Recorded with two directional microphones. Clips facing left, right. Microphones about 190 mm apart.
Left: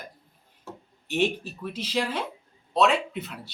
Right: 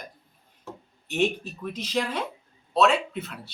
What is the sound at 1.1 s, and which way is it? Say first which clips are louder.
Speech: even; 5° left (ahead or behind).